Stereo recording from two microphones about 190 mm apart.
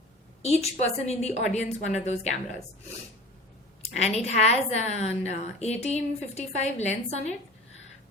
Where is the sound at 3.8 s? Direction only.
35° left (ahead or behind).